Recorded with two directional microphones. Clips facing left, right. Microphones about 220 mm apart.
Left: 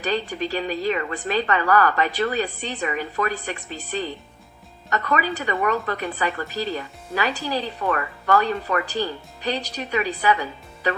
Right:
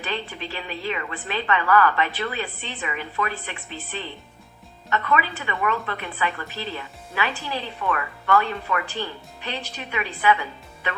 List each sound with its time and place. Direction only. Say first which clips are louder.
0.0 s a woman's voice: left 6 dB; 40° left (ahead or behind)